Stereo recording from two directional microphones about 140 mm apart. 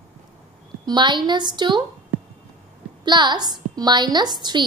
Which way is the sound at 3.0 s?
35° right (ahead or behind).